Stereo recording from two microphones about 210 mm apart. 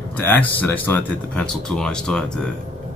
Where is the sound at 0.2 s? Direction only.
10° left (ahead or behind).